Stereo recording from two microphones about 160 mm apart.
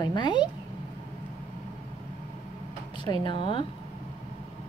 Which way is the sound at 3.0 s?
30° left (ahead or behind).